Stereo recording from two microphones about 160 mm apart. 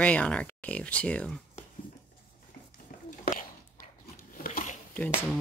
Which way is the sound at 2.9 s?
60° left (ahead or behind).